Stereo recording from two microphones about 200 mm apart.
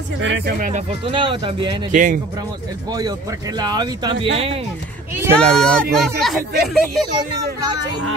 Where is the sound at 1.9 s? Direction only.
40° right (ahead or behind).